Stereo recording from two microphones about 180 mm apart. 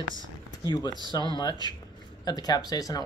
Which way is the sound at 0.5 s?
20° left (ahead or behind).